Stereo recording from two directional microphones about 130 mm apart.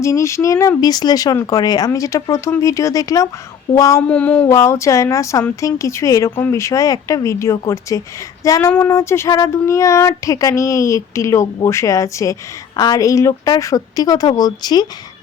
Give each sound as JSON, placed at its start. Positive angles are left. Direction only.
{"t": 0.0, "sound": "speech", "side_deg": 25}
{"t": 4.0, "sound": "a sound", "side_deg": 10}
{"t": 4.5, "sound": "speech", "side_deg": 20}